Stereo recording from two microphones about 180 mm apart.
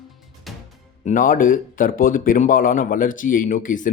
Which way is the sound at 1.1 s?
50° left (ahead or behind).